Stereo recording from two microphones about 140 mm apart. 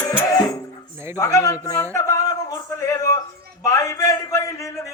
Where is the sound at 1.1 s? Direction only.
20° left (ahead or behind).